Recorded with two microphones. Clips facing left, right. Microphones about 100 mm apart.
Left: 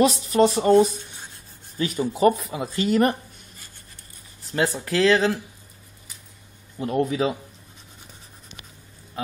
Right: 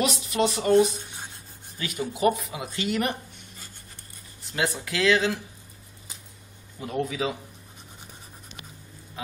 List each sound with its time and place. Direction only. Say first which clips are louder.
0.0 s speech: left 7 dB; 35° left (ahead or behind)
4.5 s speech: left 4 dB; 40° left (ahead or behind)
6.8 s speech: left 6 dB; 50° left (ahead or behind)